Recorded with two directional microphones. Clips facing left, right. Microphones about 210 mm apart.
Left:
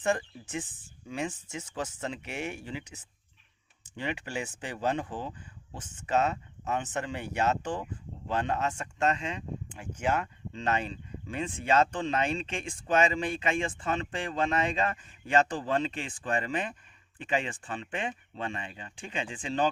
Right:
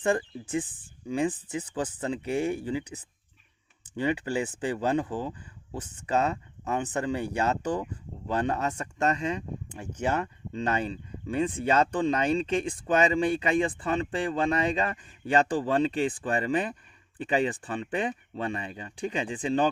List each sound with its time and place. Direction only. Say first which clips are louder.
0.0 s speech: right 3 dB; 30° right (ahead or behind)
5.7 s speech: right 1 dB; 35° right (ahead or behind)